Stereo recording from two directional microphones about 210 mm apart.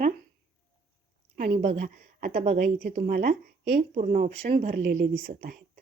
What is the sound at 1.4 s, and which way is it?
A woman's voice, 35° right (ahead or behind).